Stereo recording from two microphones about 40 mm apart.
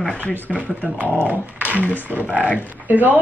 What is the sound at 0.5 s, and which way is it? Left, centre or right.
Speech, right.